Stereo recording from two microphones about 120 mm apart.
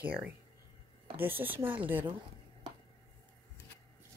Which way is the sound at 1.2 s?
15° right (ahead or behind).